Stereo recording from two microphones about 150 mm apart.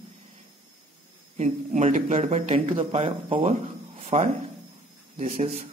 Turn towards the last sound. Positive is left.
turn(degrees=-55)  # may be behind; listen again after turning